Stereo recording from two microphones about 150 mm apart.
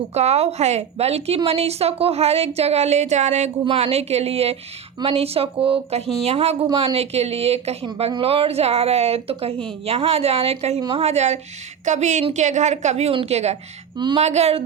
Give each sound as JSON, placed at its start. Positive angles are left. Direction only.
{"t": 0.1, "sound": "a woman's voice", "side_deg": -45}
{"t": 13.9, "sound": "speech", "side_deg": -30}
{"t": 14.2, "sound": "a woman's voice", "side_deg": -45}